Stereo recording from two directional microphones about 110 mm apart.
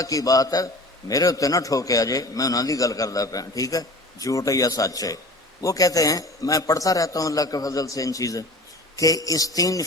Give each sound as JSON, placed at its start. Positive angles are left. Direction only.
{"t": 0.0, "sound": "a man's voice", "side_deg": 30}